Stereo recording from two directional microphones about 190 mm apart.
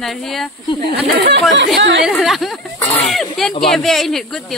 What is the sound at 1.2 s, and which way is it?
Speech, 65° right (ahead or behind).